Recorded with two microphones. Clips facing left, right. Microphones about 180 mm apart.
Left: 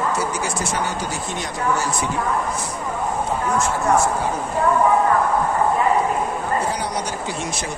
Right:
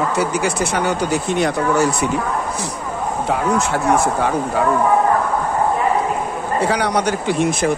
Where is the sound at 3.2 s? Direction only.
70° right (ahead or behind).